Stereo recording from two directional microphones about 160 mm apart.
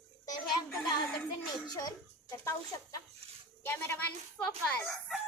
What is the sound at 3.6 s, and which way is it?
A woman's voice, 15° left (ahead or behind).